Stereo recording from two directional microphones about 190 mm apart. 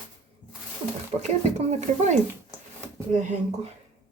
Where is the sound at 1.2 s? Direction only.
35° right (ahead or behind).